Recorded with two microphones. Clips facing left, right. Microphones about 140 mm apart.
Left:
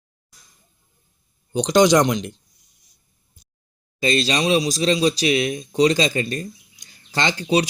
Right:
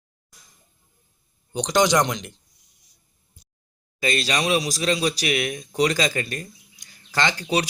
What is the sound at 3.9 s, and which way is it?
Speech, 25° left (ahead or behind).